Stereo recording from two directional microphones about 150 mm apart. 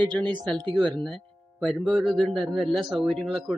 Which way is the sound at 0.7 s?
5° right (ahead or behind).